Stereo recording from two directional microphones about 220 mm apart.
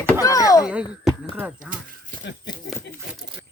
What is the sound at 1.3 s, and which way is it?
Speech, 10° right (ahead or behind).